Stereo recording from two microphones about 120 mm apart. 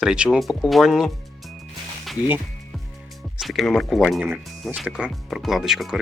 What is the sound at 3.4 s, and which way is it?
Speech, centre (ahead or behind).